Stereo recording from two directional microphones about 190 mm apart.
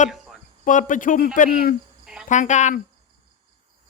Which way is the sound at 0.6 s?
40° left (ahead or behind).